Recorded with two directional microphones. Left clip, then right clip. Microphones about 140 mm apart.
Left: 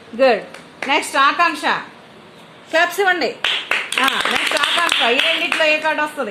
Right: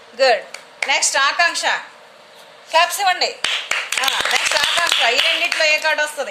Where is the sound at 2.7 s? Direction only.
90° left.